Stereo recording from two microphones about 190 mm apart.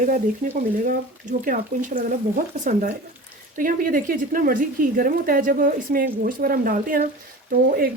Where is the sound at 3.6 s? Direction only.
45° right (ahead or behind).